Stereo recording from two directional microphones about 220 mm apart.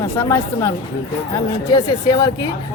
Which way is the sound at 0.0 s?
15° left (ahead or behind).